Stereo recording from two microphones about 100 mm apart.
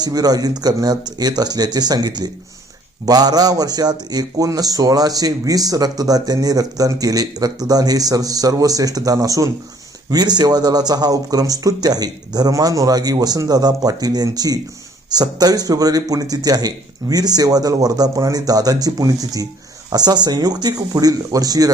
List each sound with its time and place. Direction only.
0.0 s a man's voice: 40° right (ahead or behind)